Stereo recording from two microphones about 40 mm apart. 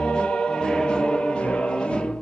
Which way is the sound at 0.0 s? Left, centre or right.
Left.